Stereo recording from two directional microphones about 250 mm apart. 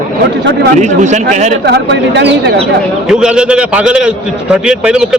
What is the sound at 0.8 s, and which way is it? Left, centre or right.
Speech, right.